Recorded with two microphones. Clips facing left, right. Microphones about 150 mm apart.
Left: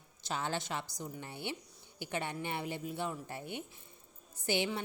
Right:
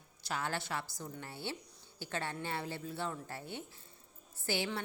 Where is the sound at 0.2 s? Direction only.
20° left (ahead or behind).